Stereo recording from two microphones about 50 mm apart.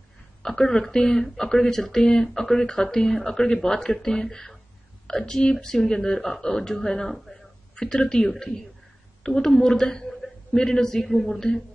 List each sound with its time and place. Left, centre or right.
0.4 s a woman's voice: centre